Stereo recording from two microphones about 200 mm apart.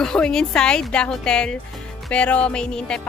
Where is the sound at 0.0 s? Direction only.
5° left (ahead or behind).